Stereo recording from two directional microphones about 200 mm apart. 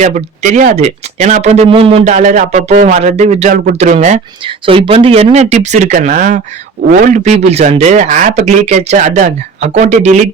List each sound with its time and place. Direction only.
0.0 s speech: 35° right (ahead or behind)